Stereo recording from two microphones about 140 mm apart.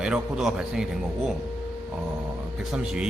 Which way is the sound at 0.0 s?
5° right (ahead or behind).